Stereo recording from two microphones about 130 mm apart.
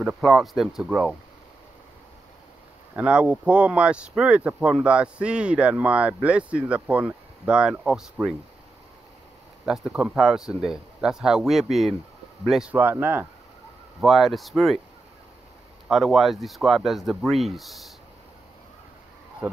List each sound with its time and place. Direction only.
0.0 s speech: centre (ahead or behind)
3.0 s speech: 10° right (ahead or behind)
9.7 s speech: 5° right (ahead or behind)
12.7 s speech: 15° right (ahead or behind)
14.0 s speech: centre (ahead or behind)
15.9 s speech: centre (ahead or behind)